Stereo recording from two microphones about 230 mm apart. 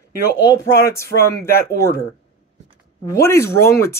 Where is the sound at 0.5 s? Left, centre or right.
Centre.